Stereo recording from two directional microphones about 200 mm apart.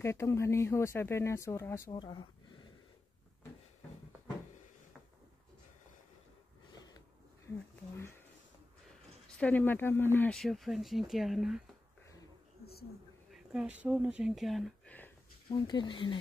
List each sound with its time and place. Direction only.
0.0 s speech: 15° left (ahead or behind)
6.7 s a sound: 20° left (ahead or behind)
9.4 s speech: 10° left (ahead or behind)
13.3 s speech: 5° right (ahead or behind)
15.4 s speech: 20° left (ahead or behind)